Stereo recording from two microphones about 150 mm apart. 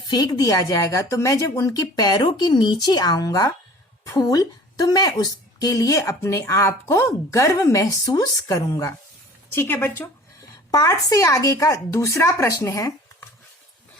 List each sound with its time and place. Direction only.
0.1 s a woman's voice: 25° left (ahead or behind)